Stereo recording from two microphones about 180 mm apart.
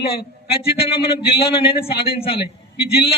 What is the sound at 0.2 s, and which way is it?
A man's voice, 30° left (ahead or behind).